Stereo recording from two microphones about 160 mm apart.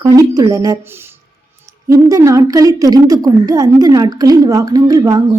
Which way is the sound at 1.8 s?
20° right (ahead or behind).